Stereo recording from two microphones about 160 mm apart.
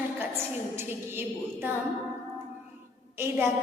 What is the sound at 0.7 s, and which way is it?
A woman's voice, 15° right (ahead or behind).